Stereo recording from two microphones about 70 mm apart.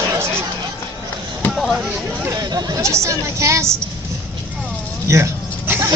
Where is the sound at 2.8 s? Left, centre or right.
Right.